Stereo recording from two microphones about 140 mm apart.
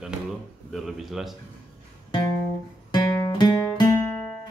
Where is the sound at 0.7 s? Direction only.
Centre (ahead or behind).